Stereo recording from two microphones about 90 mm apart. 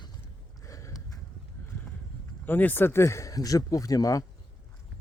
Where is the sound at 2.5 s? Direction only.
20° left (ahead or behind); by 4.2 s 40° left (ahead or behind).